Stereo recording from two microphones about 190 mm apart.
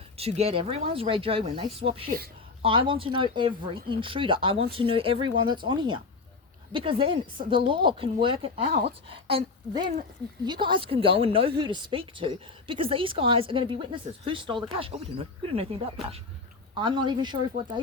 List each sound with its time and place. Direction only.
0.2 s speech: 30° right (ahead or behind)